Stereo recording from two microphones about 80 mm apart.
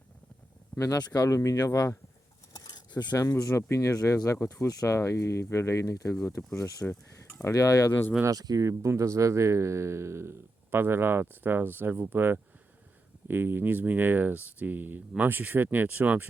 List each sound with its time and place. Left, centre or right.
0.8 s speech: left
1.4 s speech: left
2.5 s cutlery: left
3.2 s speech: left
6.8 s a sound: left
7.4 s speech: left
8.2 s speech: right